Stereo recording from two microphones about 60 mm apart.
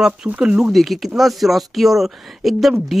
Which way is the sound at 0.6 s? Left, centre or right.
Centre.